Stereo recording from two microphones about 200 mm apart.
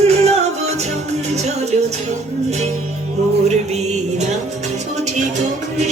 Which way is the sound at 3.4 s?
35° right (ahead or behind).